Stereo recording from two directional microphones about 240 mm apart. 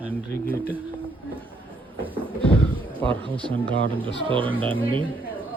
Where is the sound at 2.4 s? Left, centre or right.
Centre.